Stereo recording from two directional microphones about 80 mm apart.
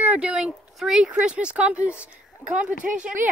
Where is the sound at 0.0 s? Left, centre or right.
Centre.